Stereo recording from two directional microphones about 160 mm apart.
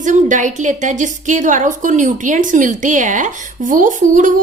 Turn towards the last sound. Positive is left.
turn(degrees=-55)  # may be behind; listen again after turning